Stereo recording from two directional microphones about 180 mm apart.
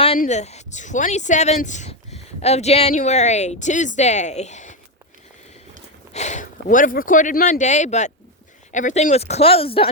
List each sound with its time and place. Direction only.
0.2 s speech: 40° left (ahead or behind)
6.1 s speech: 40° left (ahead or behind)